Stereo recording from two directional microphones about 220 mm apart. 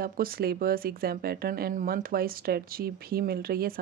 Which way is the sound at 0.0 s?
40° right (ahead or behind).